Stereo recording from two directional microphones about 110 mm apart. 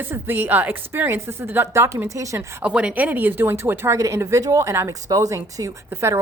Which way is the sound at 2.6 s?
10° right (ahead or behind).